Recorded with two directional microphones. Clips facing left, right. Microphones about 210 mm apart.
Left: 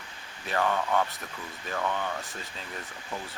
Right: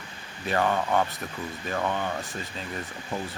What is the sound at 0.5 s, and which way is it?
Speech, 25° right (ahead or behind).